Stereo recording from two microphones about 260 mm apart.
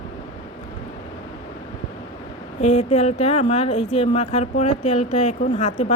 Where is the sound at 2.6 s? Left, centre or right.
Left.